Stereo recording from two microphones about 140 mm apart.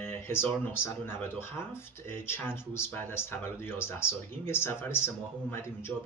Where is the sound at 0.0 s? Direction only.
15° left (ahead or behind).